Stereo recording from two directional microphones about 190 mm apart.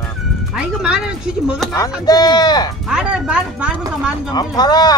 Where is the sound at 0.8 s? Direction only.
5° right (ahead or behind).